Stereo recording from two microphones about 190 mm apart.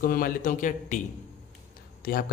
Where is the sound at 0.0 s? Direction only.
50° left (ahead or behind).